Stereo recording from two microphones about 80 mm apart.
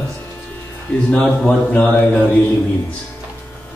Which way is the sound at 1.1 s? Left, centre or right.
Centre.